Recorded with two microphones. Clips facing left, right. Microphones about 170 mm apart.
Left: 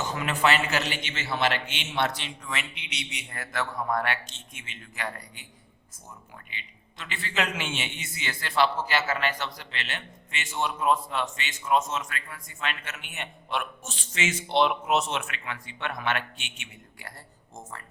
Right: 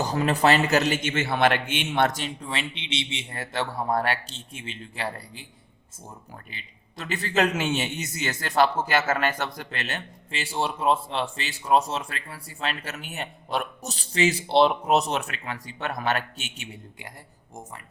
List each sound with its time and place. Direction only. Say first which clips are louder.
0.0 s a man's voice: right 4 dB; 35° right (ahead or behind)
2.4 s a man's voice: right 4 dB; 30° right (ahead or behind)
6.5 s a man's voice: right 2 dB; 40° right (ahead or behind)